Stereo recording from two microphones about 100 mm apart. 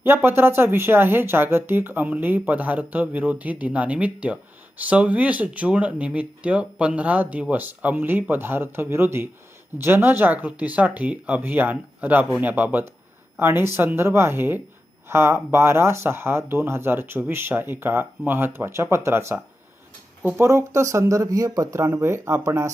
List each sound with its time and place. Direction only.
0.0 s speech: 20° right (ahead or behind)
20.4 s speech: 30° right (ahead or behind)